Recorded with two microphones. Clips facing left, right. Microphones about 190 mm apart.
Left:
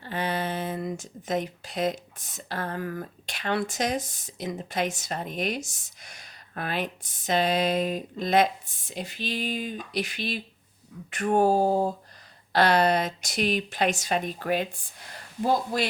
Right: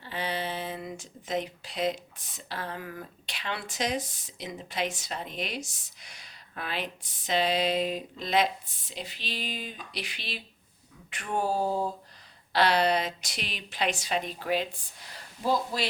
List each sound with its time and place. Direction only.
0.0 s speech: 50° left (ahead or behind)